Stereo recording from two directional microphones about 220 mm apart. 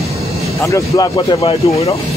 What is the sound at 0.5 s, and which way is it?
Speech, 15° left (ahead or behind).